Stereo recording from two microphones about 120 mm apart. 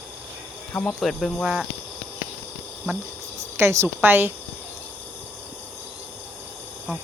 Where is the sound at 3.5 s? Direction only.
20° right (ahead or behind).